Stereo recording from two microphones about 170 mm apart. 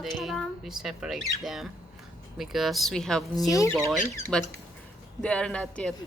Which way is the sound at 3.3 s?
20° left (ahead or behind).